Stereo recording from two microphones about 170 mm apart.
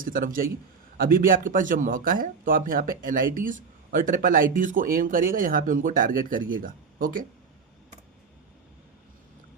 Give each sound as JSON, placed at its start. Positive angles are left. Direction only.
{"t": 0.0, "sound": "a man's voice", "side_deg": -55}